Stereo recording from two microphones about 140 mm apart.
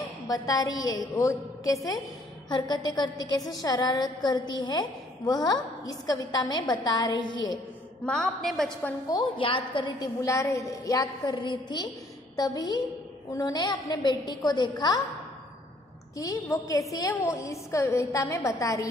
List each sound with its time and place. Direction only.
0.3 s a woman's voice: 25° left (ahead or behind)
8.0 s a woman's voice: 5° left (ahead or behind)
9.1 s a woman's voice: 35° left (ahead or behind)
16.2 s a woman's voice: 25° left (ahead or behind)